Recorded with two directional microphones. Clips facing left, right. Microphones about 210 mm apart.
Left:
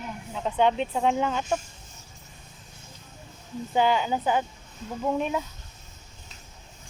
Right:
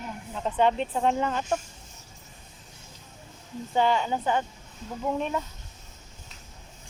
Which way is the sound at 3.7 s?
5° left (ahead or behind).